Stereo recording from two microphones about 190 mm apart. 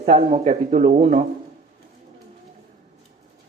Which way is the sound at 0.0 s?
35° right (ahead or behind).